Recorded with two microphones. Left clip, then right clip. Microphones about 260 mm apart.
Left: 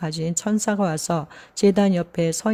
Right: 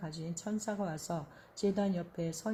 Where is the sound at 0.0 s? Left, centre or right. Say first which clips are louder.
Left 16 dB; left.